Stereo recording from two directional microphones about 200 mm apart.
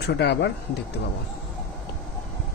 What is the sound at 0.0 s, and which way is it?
Speech, 60° left (ahead or behind).